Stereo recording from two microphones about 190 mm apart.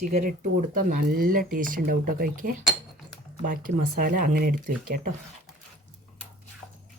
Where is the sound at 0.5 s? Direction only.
45° right (ahead or behind).